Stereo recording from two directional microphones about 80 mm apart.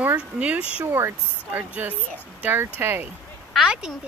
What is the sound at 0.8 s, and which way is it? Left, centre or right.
Speech, right.